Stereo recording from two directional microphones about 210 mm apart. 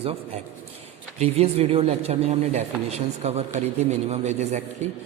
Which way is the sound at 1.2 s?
30° right (ahead or behind).